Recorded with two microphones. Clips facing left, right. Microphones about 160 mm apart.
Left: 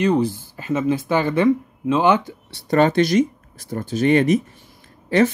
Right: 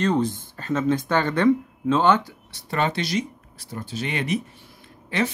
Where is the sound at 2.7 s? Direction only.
45° left (ahead or behind).